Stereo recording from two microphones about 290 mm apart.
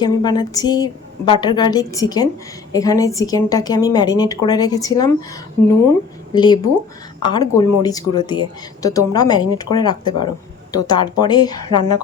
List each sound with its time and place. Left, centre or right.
0.0 s speech: centre
6.3 s speech: centre